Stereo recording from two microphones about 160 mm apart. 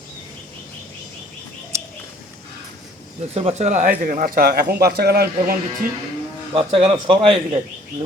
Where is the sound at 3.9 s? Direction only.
55° right (ahead or behind); by 5.5 s 75° right (ahead or behind).